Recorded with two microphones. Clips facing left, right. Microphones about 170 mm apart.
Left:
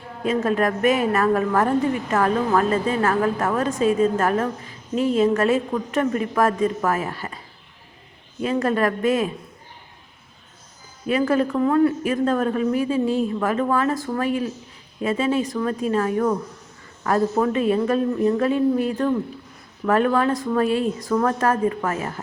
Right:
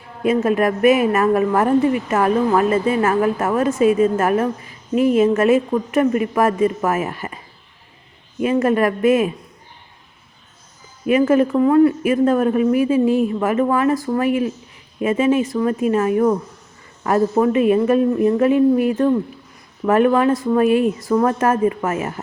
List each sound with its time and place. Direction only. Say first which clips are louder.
0.2 s a woman's voice: right 4 dB; 10° right (ahead or behind)
3.7 s a woman's voice: right 6 dB; 5° right (ahead or behind)
4.2 s a woman's voice: right 4 dB; 15° right (ahead or behind)
8.4 s a woman's voice: right 4 dB; 10° right (ahead or behind)
11.0 s a woman's voice: right 5 dB; 15° right (ahead or behind)